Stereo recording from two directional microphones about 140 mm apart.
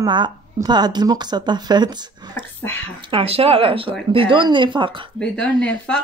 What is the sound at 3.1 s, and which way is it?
Speech, 45° right (ahead or behind).